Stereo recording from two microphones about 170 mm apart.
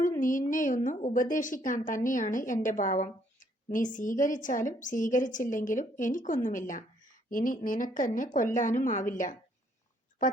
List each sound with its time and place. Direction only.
0.2 s a woman's voice: 50° left (ahead or behind)